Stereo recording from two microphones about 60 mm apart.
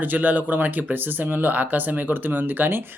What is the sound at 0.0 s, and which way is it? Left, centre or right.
Speech, right.